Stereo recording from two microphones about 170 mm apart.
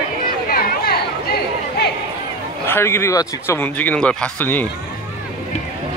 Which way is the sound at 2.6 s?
15° left (ahead or behind).